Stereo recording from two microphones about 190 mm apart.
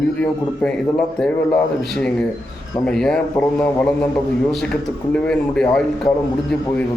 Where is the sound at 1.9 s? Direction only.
5° left (ahead or behind).